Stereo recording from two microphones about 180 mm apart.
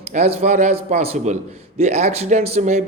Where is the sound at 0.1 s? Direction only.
40° right (ahead or behind).